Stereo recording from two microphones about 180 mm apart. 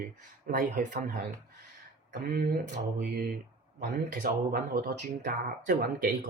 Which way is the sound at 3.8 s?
45° right (ahead or behind).